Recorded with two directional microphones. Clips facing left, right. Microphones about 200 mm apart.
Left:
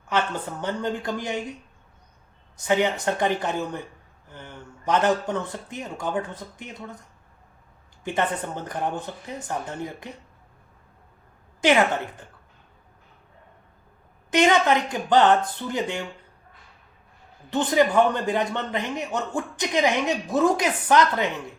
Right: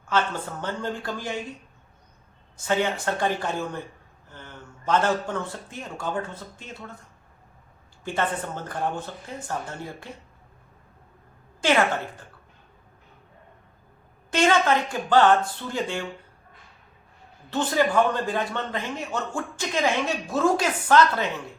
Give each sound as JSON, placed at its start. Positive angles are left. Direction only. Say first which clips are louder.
{"t": 0.1, "sound": "a man's voice", "louder": "even", "side_deg": 15}
{"t": 2.6, "sound": "a man's voice", "louder": "left 2 dB", "side_deg": 15}
{"t": 8.0, "sound": "a man's voice", "louder": "left 1 dB", "side_deg": 20}
{"t": 14.3, "sound": "speech", "louder": "left 2 dB", "side_deg": 20}
{"t": 17.5, "sound": "a man's voice", "louder": "left 2 dB", "side_deg": 20}